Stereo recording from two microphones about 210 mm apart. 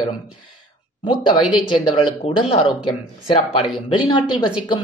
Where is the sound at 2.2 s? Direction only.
25° left (ahead or behind).